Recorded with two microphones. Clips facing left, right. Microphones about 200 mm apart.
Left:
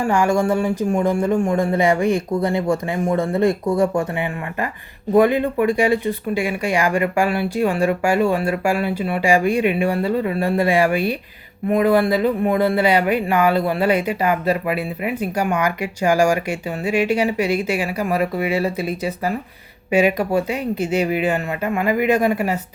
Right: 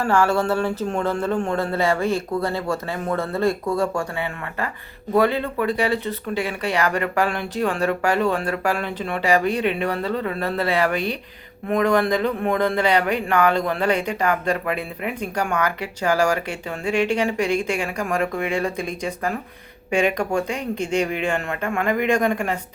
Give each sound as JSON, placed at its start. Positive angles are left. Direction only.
{"t": 0.0, "sound": "speech", "side_deg": 15}